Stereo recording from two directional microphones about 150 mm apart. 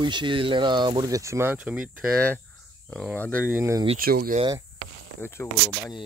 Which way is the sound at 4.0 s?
80° right.